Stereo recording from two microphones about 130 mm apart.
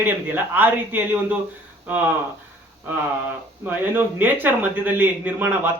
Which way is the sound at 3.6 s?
15° right (ahead or behind).